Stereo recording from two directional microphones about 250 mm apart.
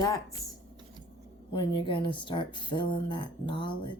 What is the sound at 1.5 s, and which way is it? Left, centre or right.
Speech, centre.